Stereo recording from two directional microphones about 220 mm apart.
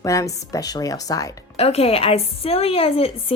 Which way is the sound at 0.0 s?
15° left (ahead or behind).